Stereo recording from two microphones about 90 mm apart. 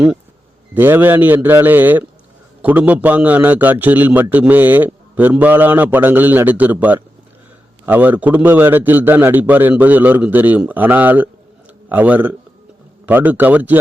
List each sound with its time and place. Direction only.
0.7 s a man's voice: 20° right (ahead or behind)